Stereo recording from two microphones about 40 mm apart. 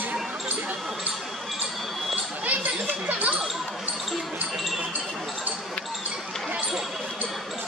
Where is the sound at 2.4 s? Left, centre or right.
Right.